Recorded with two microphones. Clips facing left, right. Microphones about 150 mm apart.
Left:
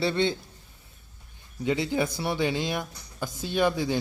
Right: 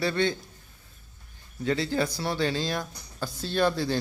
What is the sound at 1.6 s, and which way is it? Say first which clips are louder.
Speech: left 1 dB; 15° left (ahead or behind).